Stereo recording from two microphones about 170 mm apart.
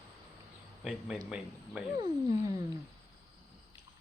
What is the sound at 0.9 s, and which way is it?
Speech, 5° right (ahead or behind).